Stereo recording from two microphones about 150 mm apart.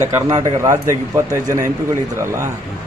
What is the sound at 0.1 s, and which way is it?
Speech, 25° right (ahead or behind).